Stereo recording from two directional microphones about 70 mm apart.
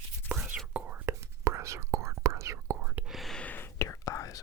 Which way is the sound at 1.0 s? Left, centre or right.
Right.